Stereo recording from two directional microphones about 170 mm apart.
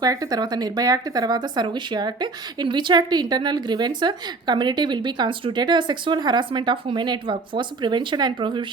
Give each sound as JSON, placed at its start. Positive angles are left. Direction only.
{"t": 0.0, "sound": "speech", "side_deg": -20}